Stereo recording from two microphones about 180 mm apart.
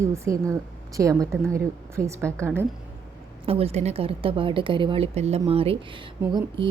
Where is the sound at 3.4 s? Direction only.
35° right (ahead or behind).